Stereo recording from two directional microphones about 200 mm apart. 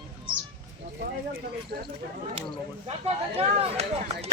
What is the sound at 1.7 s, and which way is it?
Speech, 45° right (ahead or behind).